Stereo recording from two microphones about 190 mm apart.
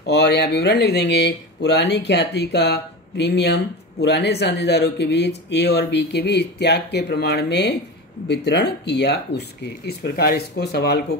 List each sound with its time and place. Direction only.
0.0 s speech: 65° left (ahead or behind)